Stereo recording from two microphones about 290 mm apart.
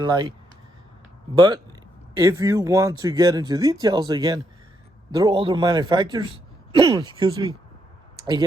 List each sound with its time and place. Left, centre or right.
0.0 s speech: centre
1.4 s speech: centre